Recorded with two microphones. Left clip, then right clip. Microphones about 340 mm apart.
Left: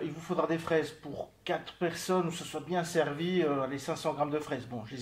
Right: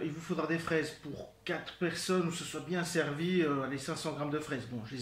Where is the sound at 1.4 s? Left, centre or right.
Centre.